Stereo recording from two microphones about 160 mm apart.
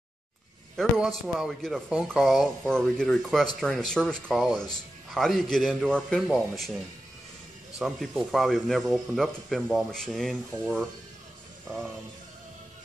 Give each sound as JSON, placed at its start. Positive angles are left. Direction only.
{"t": 0.7, "sound": "speech", "side_deg": 0}
{"t": 7.8, "sound": "speech", "side_deg": 0}